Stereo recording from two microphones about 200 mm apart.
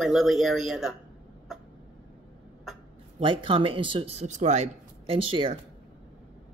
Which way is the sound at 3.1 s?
25° right (ahead or behind).